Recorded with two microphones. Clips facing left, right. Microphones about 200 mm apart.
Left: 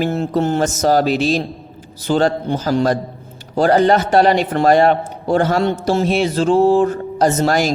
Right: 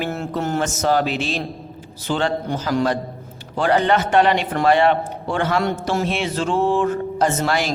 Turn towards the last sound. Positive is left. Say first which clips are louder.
# left 5 dB
turn(degrees=40)  # may be behind; listen again after turning